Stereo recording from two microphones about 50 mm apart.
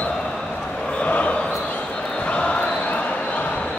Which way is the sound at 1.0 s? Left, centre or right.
Left.